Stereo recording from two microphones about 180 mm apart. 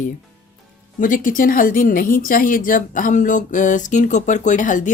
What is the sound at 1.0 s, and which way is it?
Speech, 50° left (ahead or behind).